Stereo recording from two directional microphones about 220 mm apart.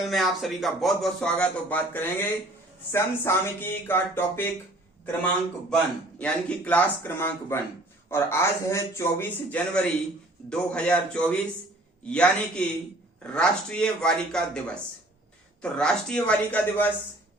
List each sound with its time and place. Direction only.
0.0 s a man's voice: centre (ahead or behind)
5.7 s a man's voice: 5° left (ahead or behind)